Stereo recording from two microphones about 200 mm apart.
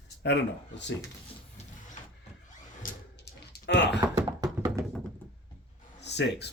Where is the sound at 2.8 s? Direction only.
45° left (ahead or behind).